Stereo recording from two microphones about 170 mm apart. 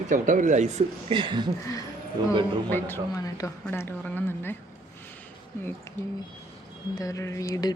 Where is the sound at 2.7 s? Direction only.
15° left (ahead or behind).